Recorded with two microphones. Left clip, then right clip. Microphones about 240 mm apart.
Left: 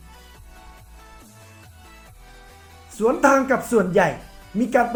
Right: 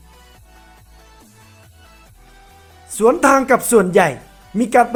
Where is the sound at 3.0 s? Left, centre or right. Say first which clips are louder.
Right 5 dB; right.